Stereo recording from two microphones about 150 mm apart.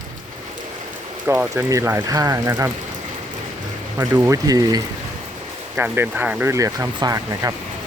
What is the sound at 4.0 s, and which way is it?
Speech, 20° right (ahead or behind).